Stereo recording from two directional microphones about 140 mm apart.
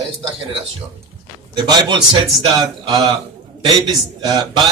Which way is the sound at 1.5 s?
30° right (ahead or behind).